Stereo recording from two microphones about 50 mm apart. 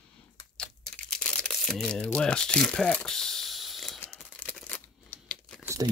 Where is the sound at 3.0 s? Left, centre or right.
Centre.